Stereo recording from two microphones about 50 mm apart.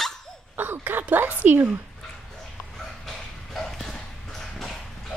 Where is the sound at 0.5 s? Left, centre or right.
Right.